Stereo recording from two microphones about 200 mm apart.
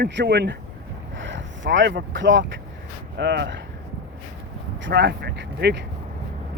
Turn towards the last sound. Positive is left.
turn(degrees=-60)  # may be behind; listen again after turning